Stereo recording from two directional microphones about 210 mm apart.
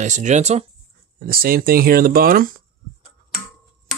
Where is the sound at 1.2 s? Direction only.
45° right (ahead or behind).